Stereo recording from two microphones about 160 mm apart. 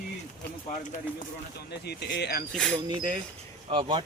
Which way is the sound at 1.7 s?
90° left.